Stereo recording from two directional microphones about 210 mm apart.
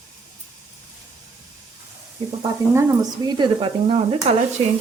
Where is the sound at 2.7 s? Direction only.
15° right (ahead or behind).